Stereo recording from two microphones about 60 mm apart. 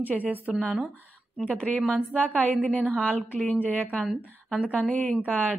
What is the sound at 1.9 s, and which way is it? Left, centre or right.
Speech, centre.